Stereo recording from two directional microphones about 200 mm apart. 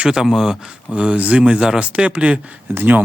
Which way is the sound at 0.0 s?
Centre (ahead or behind).